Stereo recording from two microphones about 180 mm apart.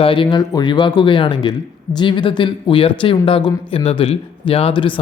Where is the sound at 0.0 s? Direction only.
30° left (ahead or behind).